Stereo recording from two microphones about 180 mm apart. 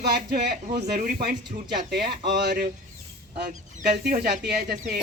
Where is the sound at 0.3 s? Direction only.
50° right (ahead or behind); by 2.6 s 70° right (ahead or behind).